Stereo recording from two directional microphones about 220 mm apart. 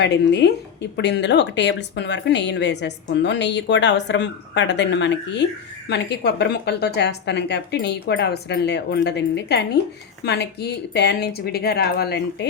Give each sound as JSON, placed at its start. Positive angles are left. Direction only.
{"t": 0.0, "sound": "speech", "side_deg": 50}